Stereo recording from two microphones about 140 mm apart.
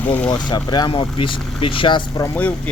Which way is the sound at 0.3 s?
30° left (ahead or behind).